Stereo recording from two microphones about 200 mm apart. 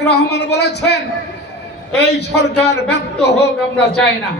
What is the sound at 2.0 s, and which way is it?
A man's voice, 55° left (ahead or behind).